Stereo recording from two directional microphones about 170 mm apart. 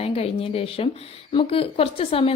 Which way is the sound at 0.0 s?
35° left (ahead or behind).